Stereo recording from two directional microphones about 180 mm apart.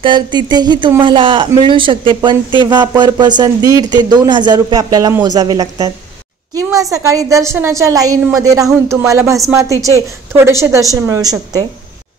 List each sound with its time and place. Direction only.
0.0 s a woman's voice: 25° right (ahead or behind)